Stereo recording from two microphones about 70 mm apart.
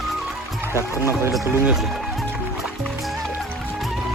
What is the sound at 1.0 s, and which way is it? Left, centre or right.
Speech, right.